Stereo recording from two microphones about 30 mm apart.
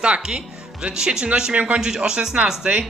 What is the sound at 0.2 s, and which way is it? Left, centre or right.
Speech, right.